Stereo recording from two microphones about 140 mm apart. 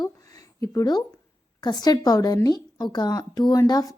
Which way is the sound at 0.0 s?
25° left (ahead or behind).